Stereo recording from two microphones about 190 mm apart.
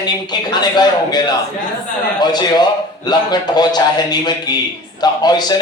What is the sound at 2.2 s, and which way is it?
A man's voice, 20° left (ahead or behind).